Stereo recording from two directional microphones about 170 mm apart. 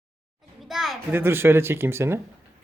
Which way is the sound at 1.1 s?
15° right (ahead or behind).